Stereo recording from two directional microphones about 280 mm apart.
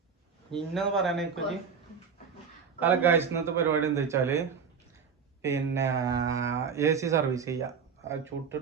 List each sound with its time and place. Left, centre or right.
0.5 s speech: centre
2.8 s speech: centre